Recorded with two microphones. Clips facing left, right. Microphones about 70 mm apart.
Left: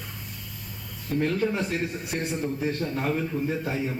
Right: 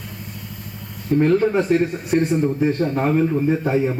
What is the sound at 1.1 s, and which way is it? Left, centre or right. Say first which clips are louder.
Speech: right 9 dB; right.